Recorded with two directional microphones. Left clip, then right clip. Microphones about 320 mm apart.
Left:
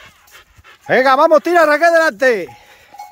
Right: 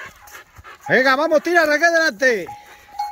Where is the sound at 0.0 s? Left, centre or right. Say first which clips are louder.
Right 5 dB; centre.